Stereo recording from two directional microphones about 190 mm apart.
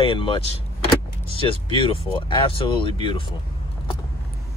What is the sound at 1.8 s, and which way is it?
Speech, 30° left (ahead or behind).